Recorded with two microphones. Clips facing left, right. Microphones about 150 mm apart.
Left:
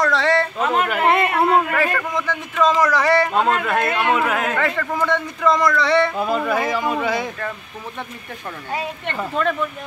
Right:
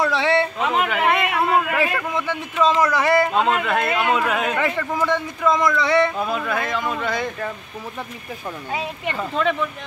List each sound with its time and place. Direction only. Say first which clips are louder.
0.0 s a sound: left 1 dB; 5° right (ahead or behind)
1.0 s a sound: left 4 dB; 30° left (ahead or behind)
1.7 s speech: left 1 dB; 10° right (ahead or behind)
4.6 s speech: left 1 dB; 10° right (ahead or behind)
6.1 s speech: left 3 dB; 5° left (ahead or behind)
8.7 s speech: left 1 dB; centre (ahead or behind)